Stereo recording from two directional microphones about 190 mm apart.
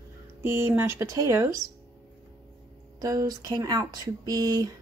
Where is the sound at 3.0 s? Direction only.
20° right (ahead or behind).